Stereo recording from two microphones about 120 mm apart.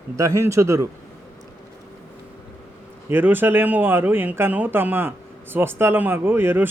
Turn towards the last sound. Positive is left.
turn(degrees=-20)  # may be behind; listen again after turning